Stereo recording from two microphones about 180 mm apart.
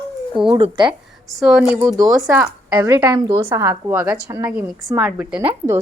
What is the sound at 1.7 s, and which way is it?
Speech, 15° right (ahead or behind).